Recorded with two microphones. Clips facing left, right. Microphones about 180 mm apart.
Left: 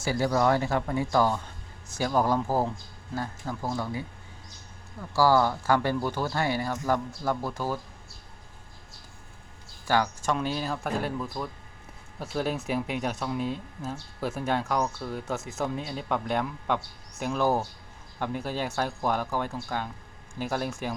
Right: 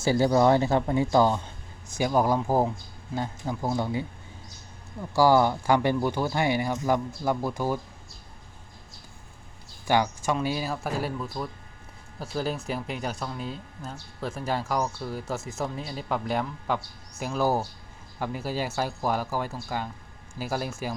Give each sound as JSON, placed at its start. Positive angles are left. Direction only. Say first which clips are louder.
{"t": 0.0, "sound": "speech", "louder": "right 4 dB", "side_deg": -25}
{"t": 2.0, "sound": "speech", "louder": "right 2 dB", "side_deg": -10}
{"t": 9.8, "sound": "speech", "louder": "right 2 dB", "side_deg": -15}